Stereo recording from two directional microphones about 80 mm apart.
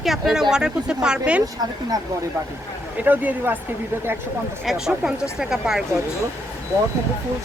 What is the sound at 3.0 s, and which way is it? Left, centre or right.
Speech, right.